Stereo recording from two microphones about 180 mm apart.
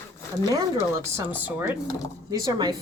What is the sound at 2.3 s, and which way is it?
Speech, 20° right (ahead or behind).